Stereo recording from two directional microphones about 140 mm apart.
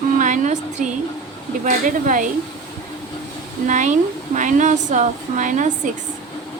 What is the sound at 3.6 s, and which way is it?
Speech, 60° right (ahead or behind).